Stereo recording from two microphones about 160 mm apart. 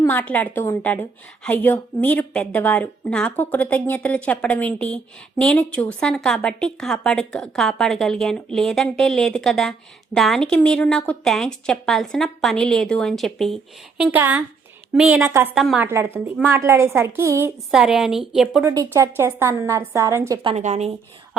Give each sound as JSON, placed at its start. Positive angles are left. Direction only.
{"t": 0.0, "sound": "a woman's voice", "side_deg": 10}
{"t": 14.0, "sound": "a woman's voice", "side_deg": -10}
{"t": 15.9, "sound": "a woman's voice", "side_deg": -15}
{"t": 17.7, "sound": "a woman's voice", "side_deg": 0}
{"t": 18.6, "sound": "a woman's voice", "side_deg": -20}
{"t": 20.6, "sound": "a woman's voice", "side_deg": -45}